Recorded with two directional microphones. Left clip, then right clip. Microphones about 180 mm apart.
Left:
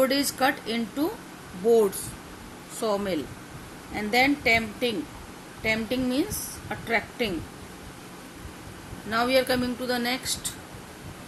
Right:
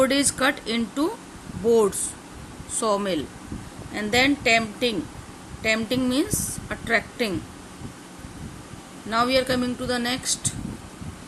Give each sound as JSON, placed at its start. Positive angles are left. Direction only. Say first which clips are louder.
{"t": 0.0, "sound": "a woman's voice", "louder": "right 2 dB", "side_deg": -30}
{"t": 9.0, "sound": "speech", "louder": "right 2 dB", "side_deg": -20}